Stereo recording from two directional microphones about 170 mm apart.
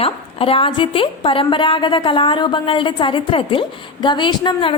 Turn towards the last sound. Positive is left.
turn(degrees=30)  # may be behind; listen again after turning